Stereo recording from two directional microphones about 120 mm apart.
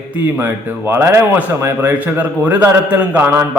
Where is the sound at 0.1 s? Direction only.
15° right (ahead or behind).